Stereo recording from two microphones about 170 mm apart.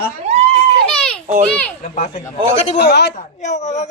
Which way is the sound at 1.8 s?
45° left (ahead or behind).